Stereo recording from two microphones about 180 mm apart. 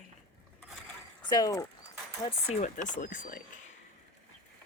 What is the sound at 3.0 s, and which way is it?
Speech, 50° left (ahead or behind).